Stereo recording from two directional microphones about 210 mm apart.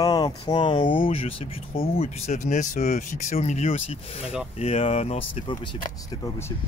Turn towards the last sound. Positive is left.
turn(degrees=30)  # may be behind; listen again after turning